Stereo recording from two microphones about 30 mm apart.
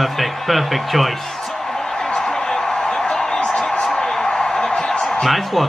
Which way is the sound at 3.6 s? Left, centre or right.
Centre.